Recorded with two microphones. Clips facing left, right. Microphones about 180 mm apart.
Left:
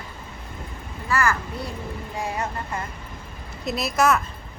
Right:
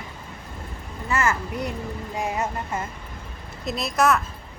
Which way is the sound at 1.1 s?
20° right (ahead or behind).